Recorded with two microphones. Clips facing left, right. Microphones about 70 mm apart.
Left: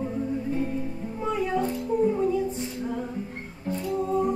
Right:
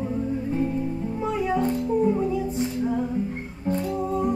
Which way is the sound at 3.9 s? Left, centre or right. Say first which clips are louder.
Left 3 dB; centre.